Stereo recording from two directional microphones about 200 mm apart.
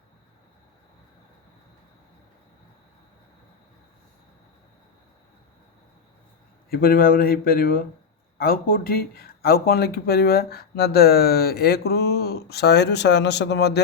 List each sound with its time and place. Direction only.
6.7 s speech: 45° left (ahead or behind)